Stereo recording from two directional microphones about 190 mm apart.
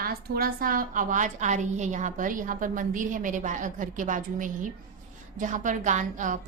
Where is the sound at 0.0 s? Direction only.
50° right (ahead or behind).